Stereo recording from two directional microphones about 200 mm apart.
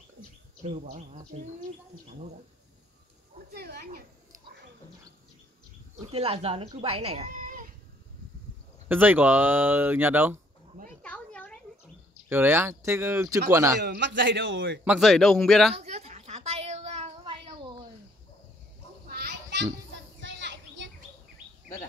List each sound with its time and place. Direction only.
0.7 s speech: 35° right (ahead or behind)
3.5 s speech: 50° right (ahead or behind)
5.9 s speech: 30° right (ahead or behind)
7.3 s a sound: 40° right (ahead or behind)
8.8 s speech: 10° right (ahead or behind)
11.0 s a sound: 5° left (ahead or behind)
12.3 s speech: 10° right (ahead or behind)
13.7 s a man's voice: 60° right (ahead or behind)
14.9 s a man's voice: centre (ahead or behind)
15.8 s a sound: 35° right (ahead or behind)
19.0 s children playing: 50° right (ahead or behind)